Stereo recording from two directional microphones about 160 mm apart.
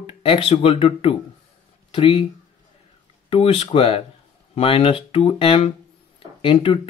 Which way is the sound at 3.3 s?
35° left (ahead or behind).